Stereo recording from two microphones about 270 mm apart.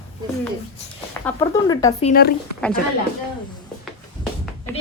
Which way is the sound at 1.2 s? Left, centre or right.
Centre.